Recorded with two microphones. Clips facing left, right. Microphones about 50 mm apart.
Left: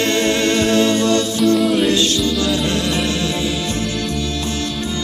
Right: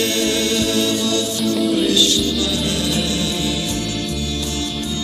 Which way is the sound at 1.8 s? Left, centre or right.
Left.